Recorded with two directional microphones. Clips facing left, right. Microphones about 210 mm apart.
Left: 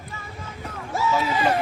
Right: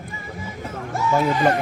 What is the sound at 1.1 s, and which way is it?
Speech, 55° right (ahead or behind).